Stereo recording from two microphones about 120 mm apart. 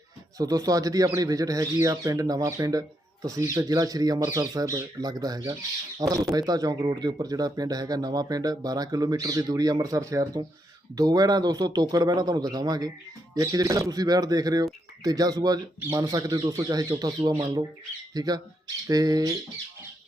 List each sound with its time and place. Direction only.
0.3 s speech: 30° right (ahead or behind)